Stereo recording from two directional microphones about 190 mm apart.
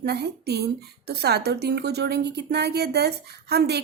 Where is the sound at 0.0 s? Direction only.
60° right (ahead or behind).